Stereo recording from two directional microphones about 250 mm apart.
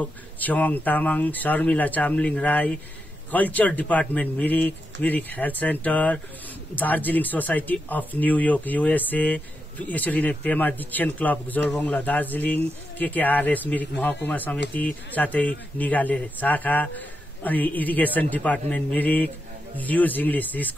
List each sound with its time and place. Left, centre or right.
0.0 s speech: centre